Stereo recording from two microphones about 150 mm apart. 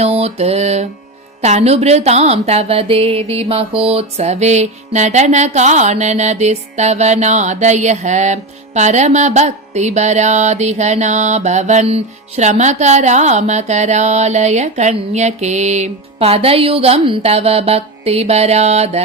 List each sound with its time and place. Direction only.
0.0 s mantra: 45° right (ahead or behind)
1.4 s speech: 50° right (ahead or behind)